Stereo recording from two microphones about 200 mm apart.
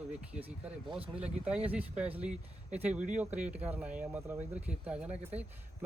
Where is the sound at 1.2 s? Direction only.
5° right (ahead or behind).